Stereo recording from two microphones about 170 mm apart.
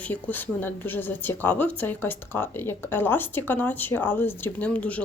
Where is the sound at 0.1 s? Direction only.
10° left (ahead or behind).